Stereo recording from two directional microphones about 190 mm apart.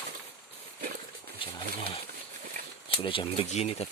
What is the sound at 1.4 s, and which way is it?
Pigeon, 30° left (ahead or behind).